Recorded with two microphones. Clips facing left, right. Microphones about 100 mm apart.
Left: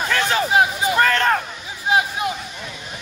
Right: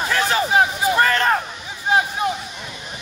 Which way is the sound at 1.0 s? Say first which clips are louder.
Left 1 dB; 10° right (ahead or behind).